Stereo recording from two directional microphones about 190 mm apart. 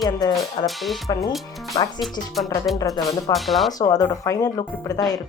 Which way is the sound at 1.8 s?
20° left (ahead or behind).